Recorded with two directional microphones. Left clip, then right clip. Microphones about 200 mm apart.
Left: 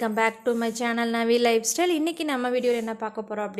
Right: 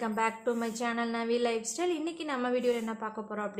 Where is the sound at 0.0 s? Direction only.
35° left (ahead or behind).